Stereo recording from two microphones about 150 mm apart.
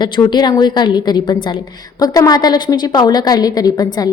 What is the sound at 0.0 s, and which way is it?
A woman's voice, 30° left (ahead or behind).